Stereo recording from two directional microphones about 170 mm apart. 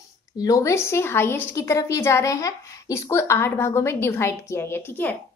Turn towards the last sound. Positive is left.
turn(degrees=10)  # may be behind; listen again after turning